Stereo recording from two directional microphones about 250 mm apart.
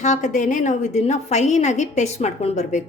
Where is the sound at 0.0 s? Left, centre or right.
Left.